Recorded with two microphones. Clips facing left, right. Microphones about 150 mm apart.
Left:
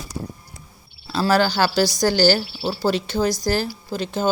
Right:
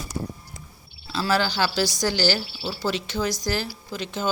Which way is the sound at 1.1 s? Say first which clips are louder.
Left 5 dB; 45° left (ahead or behind).